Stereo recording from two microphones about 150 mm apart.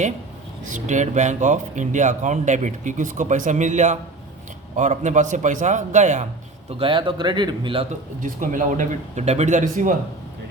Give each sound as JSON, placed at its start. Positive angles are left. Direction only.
{"t": 0.6, "sound": "speech", "side_deg": -55}
{"t": 6.7, "sound": "speech", "side_deg": -35}
{"t": 8.2, "sound": "speech", "side_deg": -60}